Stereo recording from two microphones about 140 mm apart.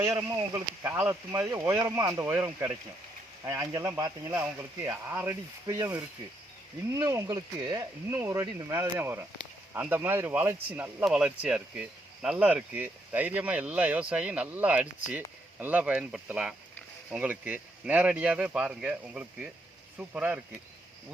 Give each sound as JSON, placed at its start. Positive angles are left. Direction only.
{"t": 0.2, "sound": "speech", "side_deg": -15}
{"t": 4.3, "sound": "speech", "side_deg": -15}